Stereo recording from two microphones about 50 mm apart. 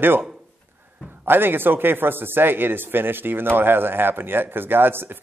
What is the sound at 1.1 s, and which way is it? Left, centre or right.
A man's voice, right.